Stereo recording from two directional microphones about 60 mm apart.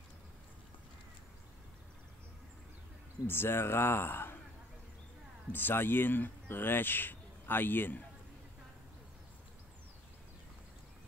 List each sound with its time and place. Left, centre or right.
3.3 s speech: left
5.5 s speech: left